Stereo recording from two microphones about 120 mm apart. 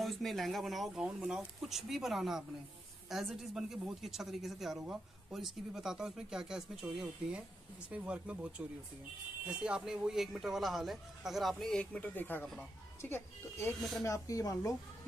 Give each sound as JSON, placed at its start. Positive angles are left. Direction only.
{"t": 0.0, "sound": "speech", "side_deg": 0}
{"t": 13.7, "sound": "speech", "side_deg": 0}
{"t": 14.0, "sound": "speech", "side_deg": 25}